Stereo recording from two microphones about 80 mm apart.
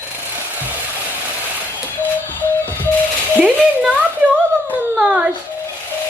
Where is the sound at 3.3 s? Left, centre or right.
Centre.